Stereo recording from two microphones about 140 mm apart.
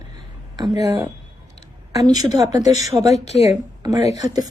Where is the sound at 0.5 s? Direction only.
30° right (ahead or behind).